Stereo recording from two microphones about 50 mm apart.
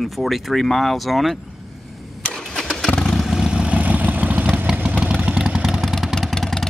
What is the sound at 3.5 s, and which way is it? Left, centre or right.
Vehicle, right.